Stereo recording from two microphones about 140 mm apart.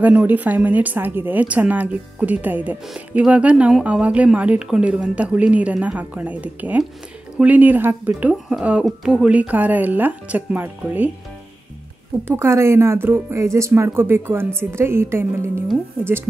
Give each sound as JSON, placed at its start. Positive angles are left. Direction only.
{"t": 0.0, "sound": "a woman's voice", "side_deg": -10}
{"t": 12.3, "sound": "a woman's voice", "side_deg": -20}